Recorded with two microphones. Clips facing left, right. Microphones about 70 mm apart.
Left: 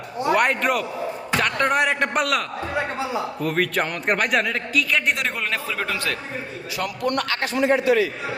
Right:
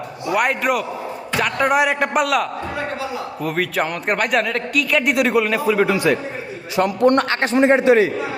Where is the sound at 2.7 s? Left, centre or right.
Left.